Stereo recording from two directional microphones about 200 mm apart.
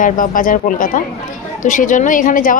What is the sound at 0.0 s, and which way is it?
A woman's voice, 40° left (ahead or behind).